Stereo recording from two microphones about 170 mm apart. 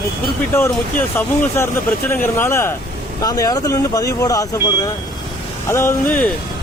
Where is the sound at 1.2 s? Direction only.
10° left (ahead or behind).